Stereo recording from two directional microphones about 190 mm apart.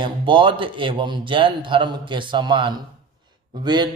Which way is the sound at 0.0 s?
25° right (ahead or behind).